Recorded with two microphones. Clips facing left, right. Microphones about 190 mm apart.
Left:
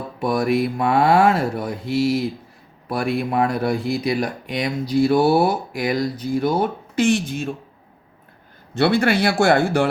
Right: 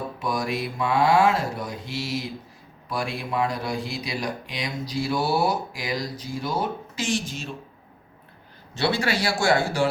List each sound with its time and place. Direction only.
0.2 s speech: 55° left (ahead or behind)
8.7 s speech: 55° left (ahead or behind)